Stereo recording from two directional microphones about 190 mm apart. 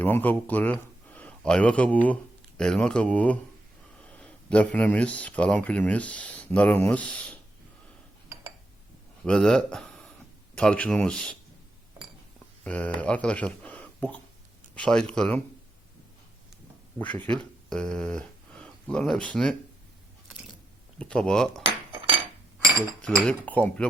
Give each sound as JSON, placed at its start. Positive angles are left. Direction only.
{"t": 0.0, "sound": "speech", "side_deg": 10}
{"t": 9.2, "sound": "speech", "side_deg": 5}
{"t": 12.6, "sound": "speech", "side_deg": 5}
{"t": 17.0, "sound": "speech", "side_deg": 5}
{"t": 21.0, "sound": "speech", "side_deg": 5}
{"t": 23.0, "sound": "speech", "side_deg": 5}